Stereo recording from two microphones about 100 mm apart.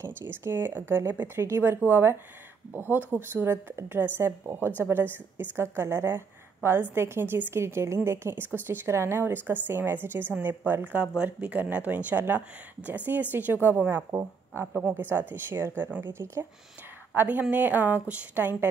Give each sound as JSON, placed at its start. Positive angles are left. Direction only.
{"t": 0.3, "sound": "a woman's voice", "side_deg": -25}
{"t": 14.7, "sound": "speech", "side_deg": -10}
{"t": 15.0, "sound": "a woman's voice", "side_deg": -20}